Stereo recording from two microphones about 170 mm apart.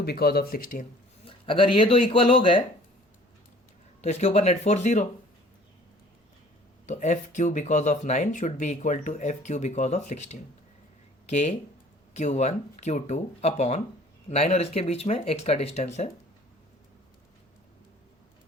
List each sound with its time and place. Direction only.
0.0 s speech: 65° left (ahead or behind)
1.3 s speech: 30° left (ahead or behind)
4.0 s speech: 40° left (ahead or behind)
6.8 s speech: 45° left (ahead or behind)